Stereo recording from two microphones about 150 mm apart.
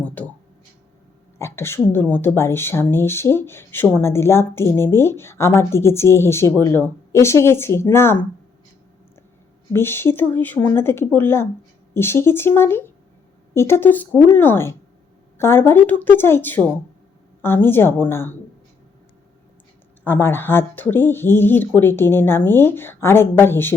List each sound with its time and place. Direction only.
0.0 s a sound: 10° left (ahead or behind)
1.4 s a woman's voice: 15° left (ahead or behind)
9.7 s a woman's voice: 15° left (ahead or behind)
20.1 s a woman's voice: 15° left (ahead or behind)